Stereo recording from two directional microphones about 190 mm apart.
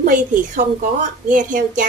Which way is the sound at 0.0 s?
45° right (ahead or behind).